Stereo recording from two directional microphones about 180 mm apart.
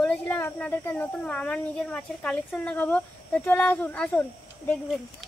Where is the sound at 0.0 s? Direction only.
5° left (ahead or behind).